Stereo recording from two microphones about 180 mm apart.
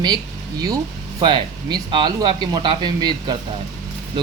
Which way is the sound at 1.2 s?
25° right (ahead or behind).